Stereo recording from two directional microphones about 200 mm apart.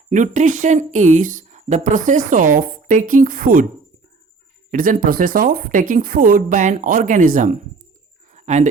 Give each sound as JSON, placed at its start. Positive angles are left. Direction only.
{"t": 0.1, "sound": "speech", "side_deg": -40}
{"t": 4.7, "sound": "speech", "side_deg": -45}
{"t": 8.3, "sound": "bird", "side_deg": -35}